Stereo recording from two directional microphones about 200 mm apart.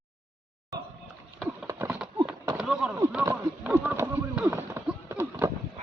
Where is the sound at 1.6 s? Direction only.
10° right (ahead or behind).